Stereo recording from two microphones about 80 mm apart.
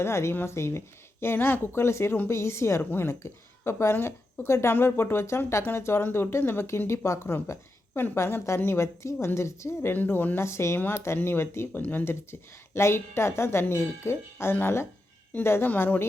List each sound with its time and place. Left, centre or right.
0.0 s a woman's voice: left